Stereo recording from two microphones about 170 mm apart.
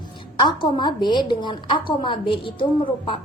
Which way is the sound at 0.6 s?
25° left (ahead or behind).